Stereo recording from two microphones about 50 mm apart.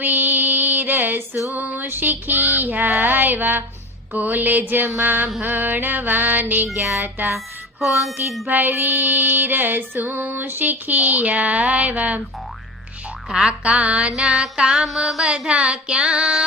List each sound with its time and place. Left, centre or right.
0.0 s female singing: right
7.3 s music: centre
8.4 s female singing: right
13.3 s music: centre
14.8 s music: centre
15.2 s music: centre